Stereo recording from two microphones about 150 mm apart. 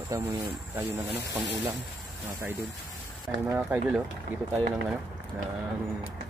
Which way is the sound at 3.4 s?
10° right (ahead or behind).